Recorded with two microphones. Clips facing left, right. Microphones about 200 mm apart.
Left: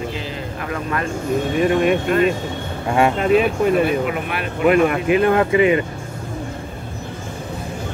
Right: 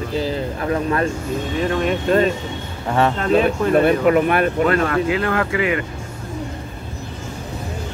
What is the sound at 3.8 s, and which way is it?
Speech, 50° right (ahead or behind).